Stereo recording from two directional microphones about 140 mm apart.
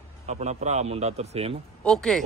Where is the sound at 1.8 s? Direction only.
5° left (ahead or behind).